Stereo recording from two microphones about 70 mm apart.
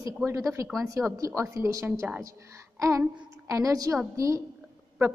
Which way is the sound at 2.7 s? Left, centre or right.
Right.